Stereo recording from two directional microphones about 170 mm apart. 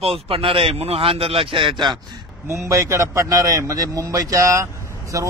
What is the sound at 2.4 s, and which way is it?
Speech, 15° right (ahead or behind).